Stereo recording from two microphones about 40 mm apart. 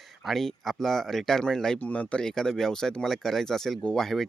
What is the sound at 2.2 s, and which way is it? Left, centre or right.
Speech, centre.